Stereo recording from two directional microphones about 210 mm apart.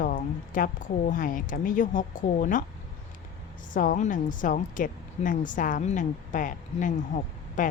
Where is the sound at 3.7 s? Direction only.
40° left (ahead or behind).